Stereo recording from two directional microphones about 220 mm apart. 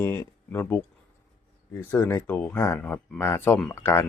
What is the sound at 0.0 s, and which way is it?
Speech, 10° left (ahead or behind).